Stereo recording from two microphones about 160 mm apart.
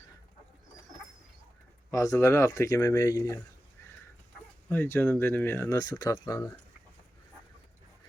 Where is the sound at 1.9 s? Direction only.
20° left (ahead or behind).